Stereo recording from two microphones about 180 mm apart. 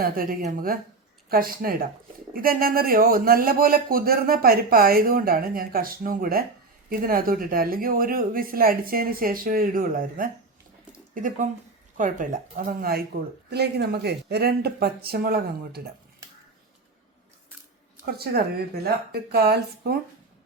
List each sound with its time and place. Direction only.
0.0 s speech: 55° right (ahead or behind)
18.0 s speech: 60° right (ahead or behind)